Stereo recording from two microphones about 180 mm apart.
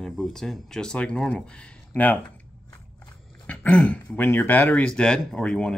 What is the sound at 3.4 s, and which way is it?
Speech, 10° left (ahead or behind).